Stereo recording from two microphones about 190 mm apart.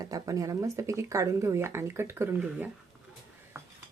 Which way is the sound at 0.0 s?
20° right (ahead or behind).